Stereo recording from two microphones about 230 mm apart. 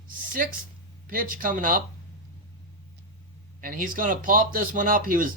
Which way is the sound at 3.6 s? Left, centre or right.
Right.